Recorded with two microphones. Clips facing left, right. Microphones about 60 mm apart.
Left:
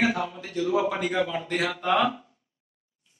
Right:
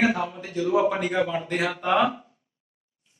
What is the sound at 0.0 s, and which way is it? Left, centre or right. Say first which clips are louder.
A man's voice: right 2 dB; centre.